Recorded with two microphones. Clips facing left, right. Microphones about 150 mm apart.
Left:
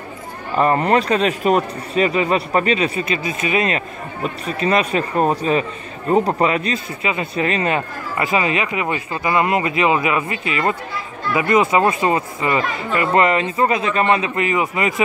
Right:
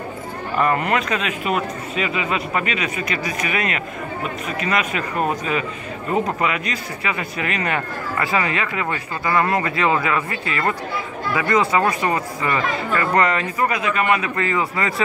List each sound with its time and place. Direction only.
0.6 s speech: 35° left (ahead or behind)